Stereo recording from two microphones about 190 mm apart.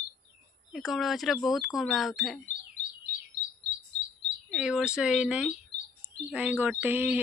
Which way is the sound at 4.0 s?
65° right (ahead or behind).